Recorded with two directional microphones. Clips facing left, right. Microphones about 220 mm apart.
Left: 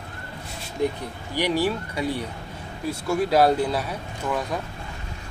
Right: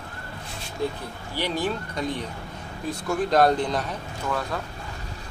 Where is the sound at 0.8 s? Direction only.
20° left (ahead or behind).